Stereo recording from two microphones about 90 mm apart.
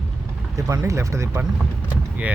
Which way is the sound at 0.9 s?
35° right (ahead or behind).